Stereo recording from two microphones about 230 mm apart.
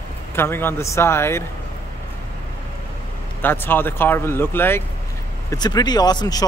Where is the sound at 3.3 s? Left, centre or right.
Centre.